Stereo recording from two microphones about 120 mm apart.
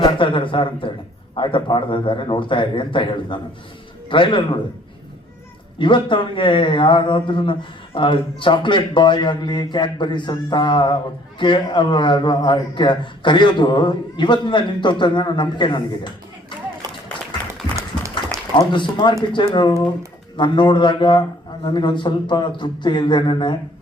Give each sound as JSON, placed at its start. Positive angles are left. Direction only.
{"t": 0.0, "sound": "a man's voice", "side_deg": 45}
{"t": 5.8, "sound": "speech", "side_deg": 45}
{"t": 18.5, "sound": "speech", "side_deg": 40}